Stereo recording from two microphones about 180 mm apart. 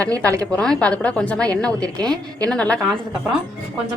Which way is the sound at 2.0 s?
20° right (ahead or behind).